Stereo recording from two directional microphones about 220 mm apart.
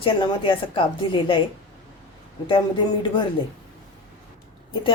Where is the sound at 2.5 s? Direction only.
20° left (ahead or behind).